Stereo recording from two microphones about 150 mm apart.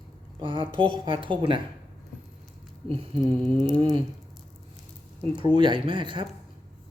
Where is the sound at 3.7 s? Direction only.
30° right (ahead or behind).